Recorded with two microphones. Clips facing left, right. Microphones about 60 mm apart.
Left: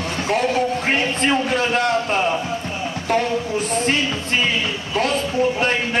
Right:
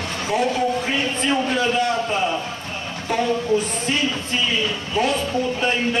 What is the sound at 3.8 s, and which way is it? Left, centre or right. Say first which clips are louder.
Music: left 2 dB; left.